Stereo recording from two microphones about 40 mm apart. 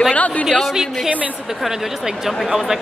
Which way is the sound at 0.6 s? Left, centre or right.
Centre.